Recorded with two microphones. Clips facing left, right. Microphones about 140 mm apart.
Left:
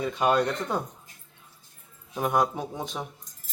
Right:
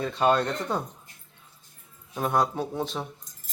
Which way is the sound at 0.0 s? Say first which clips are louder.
Even; 10° left (ahead or behind).